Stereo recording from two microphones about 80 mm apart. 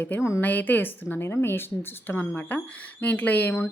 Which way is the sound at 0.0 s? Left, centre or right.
Left.